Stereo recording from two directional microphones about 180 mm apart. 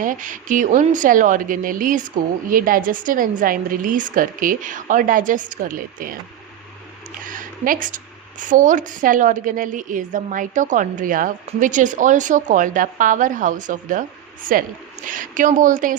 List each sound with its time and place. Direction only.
0.0 s a woman's voice: 45° right (ahead or behind)
7.3 s a woman's voice: 50° right (ahead or behind)